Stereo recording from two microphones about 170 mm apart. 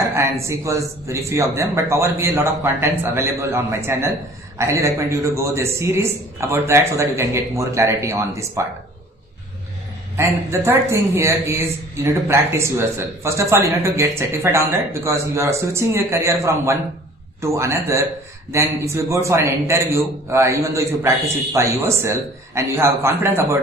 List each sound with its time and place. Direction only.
0.1 s a man's voice: 15° right (ahead or behind)
10.1 s a man's voice: 15° right (ahead or behind)